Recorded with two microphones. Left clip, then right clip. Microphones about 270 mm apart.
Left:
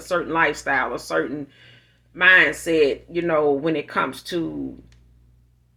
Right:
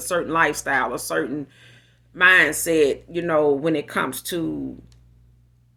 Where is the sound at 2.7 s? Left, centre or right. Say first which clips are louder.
Even; right.